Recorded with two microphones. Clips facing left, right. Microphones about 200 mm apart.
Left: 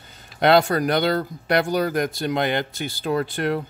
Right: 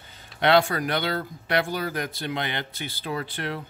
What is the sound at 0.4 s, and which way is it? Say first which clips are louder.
Speech: left 4 dB; 40° left (ahead or behind).